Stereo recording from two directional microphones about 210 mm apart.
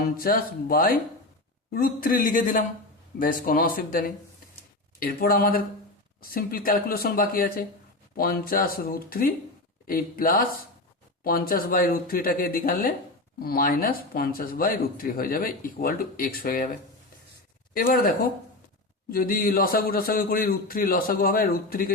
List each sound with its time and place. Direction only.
0.2 s a man's voice: 45° left (ahead or behind)
17.7 s speech: 40° left (ahead or behind)
19.1 s speech: 45° left (ahead or behind)